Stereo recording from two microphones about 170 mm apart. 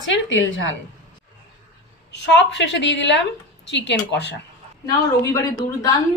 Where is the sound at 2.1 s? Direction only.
90° left.